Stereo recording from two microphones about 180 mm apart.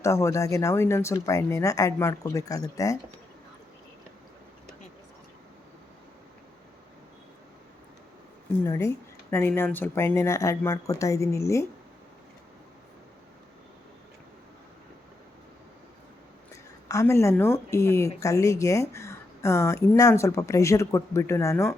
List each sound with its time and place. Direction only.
0.0 s speech: 15° left (ahead or behind)
8.6 s speech: 15° left (ahead or behind)
16.9 s speech: 15° left (ahead or behind)